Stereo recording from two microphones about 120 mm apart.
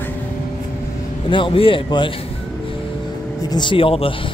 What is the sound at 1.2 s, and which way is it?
Speech, 45° left (ahead or behind).